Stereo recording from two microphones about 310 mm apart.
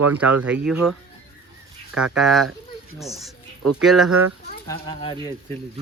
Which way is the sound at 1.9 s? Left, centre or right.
Centre.